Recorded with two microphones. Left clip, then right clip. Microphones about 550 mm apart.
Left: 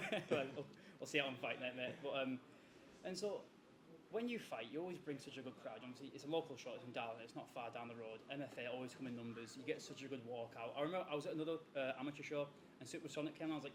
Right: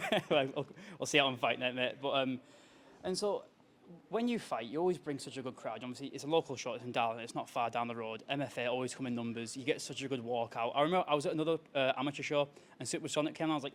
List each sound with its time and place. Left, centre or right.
0.0 s speech: right
4.1 s speech: right